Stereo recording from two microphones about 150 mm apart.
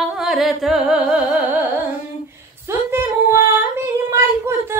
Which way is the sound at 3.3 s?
20° right (ahead or behind).